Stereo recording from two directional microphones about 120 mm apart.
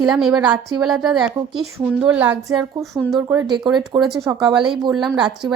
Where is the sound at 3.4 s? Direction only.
40° right (ahead or behind).